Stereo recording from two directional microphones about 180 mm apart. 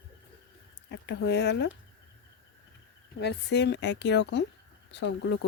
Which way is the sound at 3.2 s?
70° left (ahead or behind).